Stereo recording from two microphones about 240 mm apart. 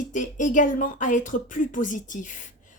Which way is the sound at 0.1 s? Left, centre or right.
Left.